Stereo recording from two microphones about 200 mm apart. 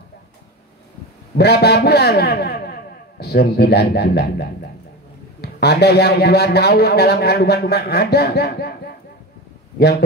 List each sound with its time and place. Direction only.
1.3 s a man's voice: 55° left (ahead or behind)